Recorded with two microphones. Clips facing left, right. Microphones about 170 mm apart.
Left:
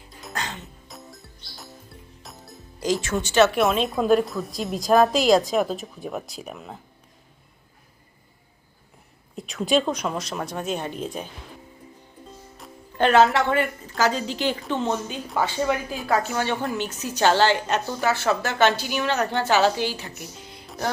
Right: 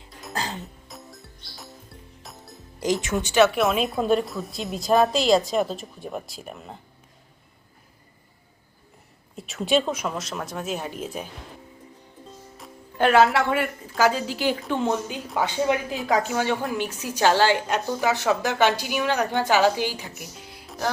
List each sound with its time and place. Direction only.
0.3 s music: 35° right (ahead or behind)
0.9 s music: centre (ahead or behind)
2.8 s a woman's voice: 20° right (ahead or behind)
3.5 s a woman's voice: centre (ahead or behind)
9.3 s a woman's voice: centre (ahead or behind)
12.5 s a woman's voice: 5° right (ahead or behind)